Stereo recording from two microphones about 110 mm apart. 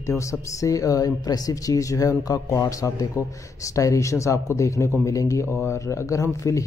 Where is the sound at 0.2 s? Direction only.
30° left (ahead or behind).